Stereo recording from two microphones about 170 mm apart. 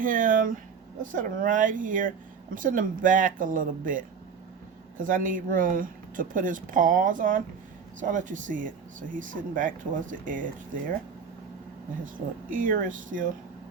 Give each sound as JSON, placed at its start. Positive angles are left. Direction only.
{"t": 0.0, "sound": "speech", "side_deg": -50}
{"t": 5.0, "sound": "speech", "side_deg": -50}
{"t": 12.0, "sound": "speech", "side_deg": -50}